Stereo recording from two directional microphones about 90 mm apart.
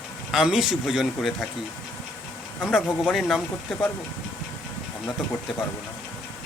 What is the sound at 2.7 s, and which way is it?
Speech, 5° right (ahead or behind).